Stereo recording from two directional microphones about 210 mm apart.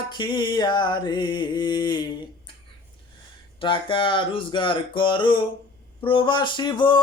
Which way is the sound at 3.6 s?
25° left (ahead or behind).